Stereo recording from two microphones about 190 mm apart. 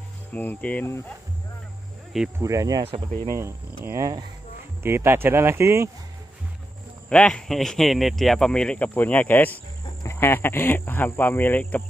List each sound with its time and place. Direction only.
0.3 s a man's voice: 10° left (ahead or behind)
2.1 s speech: 5° right (ahead or behind)
2.4 s speech: 15° right (ahead or behind)
7.1 s a man's voice: 5° left (ahead or behind)